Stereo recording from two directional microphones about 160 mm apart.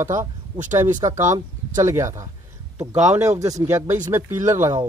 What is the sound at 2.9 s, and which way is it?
Speech, 45° right (ahead or behind).